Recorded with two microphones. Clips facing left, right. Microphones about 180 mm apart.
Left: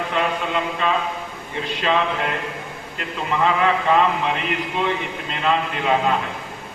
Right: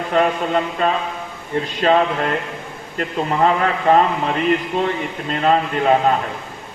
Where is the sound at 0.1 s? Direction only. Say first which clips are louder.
Right 8 dB; 45° right (ahead or behind).